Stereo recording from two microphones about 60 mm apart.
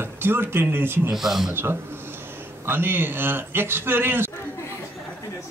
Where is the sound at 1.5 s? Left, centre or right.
Right.